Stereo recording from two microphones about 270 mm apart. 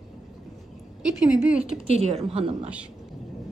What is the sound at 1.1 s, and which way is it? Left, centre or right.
Speech, centre.